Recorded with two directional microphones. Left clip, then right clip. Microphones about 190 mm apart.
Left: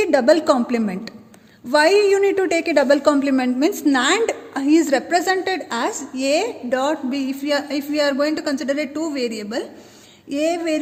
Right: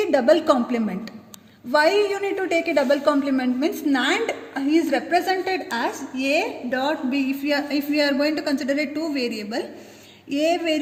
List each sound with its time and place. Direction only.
0.0 s a woman's voice: 55° left (ahead or behind)